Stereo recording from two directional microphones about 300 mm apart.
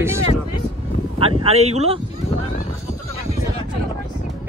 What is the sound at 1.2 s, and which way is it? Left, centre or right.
Speech, centre.